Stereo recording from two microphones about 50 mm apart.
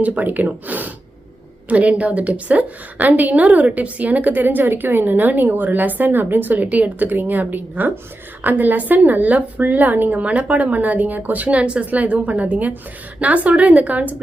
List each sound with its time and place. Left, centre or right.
0.0 s a woman's voice: right